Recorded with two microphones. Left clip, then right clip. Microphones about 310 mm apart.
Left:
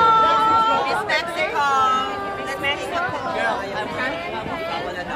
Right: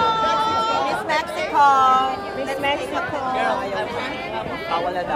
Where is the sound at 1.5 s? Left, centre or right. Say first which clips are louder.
Right 5 dB; right.